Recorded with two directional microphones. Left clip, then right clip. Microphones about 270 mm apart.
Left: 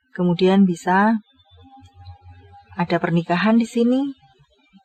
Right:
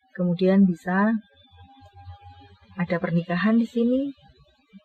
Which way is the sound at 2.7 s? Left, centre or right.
Left.